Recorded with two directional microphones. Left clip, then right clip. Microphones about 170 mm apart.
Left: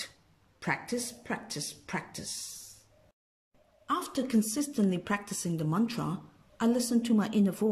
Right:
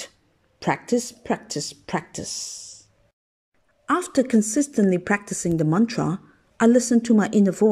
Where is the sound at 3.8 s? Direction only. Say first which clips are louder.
Right 10 dB; 45° right (ahead or behind).